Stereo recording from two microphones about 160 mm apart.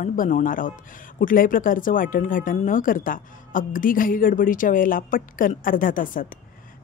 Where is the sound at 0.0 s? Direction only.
55° left (ahead or behind).